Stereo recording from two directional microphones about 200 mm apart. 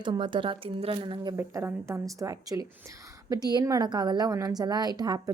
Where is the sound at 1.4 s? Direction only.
10° right (ahead or behind).